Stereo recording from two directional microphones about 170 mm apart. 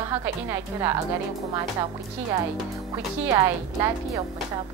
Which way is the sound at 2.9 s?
15° right (ahead or behind).